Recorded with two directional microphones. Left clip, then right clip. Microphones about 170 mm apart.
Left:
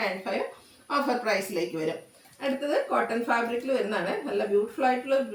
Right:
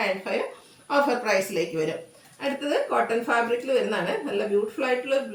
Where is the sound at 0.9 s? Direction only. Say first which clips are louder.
Right 4 dB; 15° right (ahead or behind).